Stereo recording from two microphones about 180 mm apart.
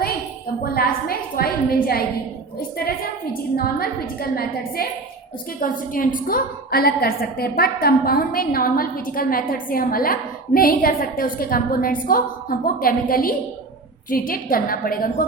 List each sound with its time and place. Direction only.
0.6 s a woman's voice: 55° left (ahead or behind)